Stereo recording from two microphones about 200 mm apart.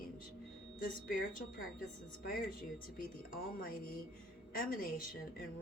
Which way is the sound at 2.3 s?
45° left (ahead or behind).